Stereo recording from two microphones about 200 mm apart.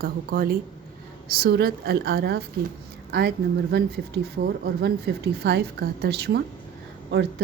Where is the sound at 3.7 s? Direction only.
55° right (ahead or behind).